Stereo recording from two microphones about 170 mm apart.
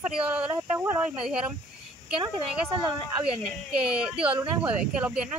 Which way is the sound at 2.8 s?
30° right (ahead or behind).